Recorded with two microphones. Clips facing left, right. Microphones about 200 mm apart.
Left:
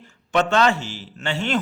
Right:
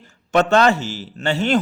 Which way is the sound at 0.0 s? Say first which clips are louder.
Right 4 dB; 40° right (ahead or behind).